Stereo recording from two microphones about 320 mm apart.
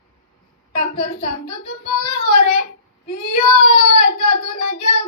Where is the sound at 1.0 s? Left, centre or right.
Left.